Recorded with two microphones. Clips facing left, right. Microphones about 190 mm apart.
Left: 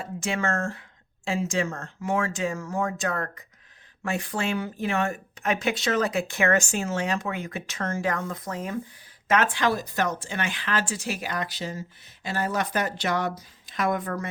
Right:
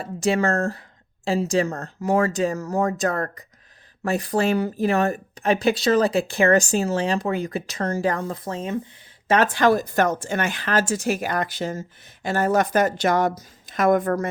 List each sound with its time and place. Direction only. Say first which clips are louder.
0.0 s a woman's voice: right 7 dB; 35° right (ahead or behind)